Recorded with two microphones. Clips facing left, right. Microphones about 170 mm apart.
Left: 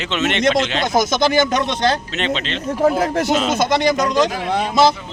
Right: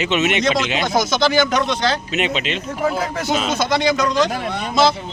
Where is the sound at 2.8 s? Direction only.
45° left (ahead or behind).